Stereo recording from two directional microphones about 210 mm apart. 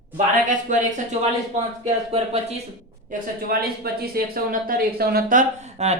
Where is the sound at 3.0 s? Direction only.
45° right (ahead or behind).